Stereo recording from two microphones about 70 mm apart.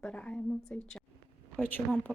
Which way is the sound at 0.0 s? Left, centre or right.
Centre.